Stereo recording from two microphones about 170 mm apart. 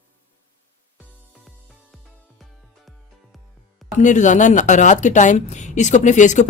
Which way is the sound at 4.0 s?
45° left (ahead or behind).